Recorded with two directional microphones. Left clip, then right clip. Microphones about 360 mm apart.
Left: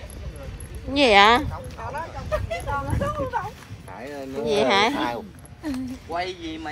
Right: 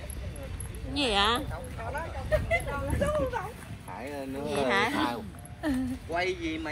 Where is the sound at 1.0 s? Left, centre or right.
Centre.